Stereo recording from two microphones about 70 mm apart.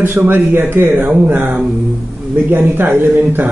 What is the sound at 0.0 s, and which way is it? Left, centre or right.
Speech, right.